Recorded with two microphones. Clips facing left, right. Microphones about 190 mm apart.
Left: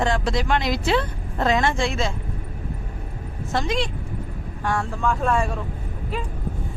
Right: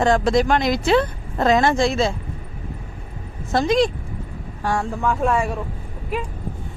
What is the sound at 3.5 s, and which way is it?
Speech, 40° right (ahead or behind).